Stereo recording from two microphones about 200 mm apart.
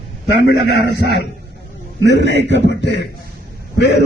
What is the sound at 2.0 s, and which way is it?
A man's voice, 60° left (ahead or behind).